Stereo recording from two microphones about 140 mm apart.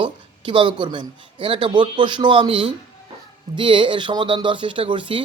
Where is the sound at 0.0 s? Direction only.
35° right (ahead or behind).